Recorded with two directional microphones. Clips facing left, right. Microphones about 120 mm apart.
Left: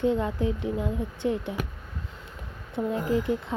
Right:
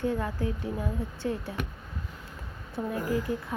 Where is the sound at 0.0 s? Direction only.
20° left (ahead or behind).